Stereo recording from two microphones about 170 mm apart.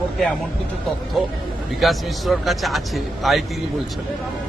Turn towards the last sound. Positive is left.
turn(degrees=0)  # may be behind; listen again after turning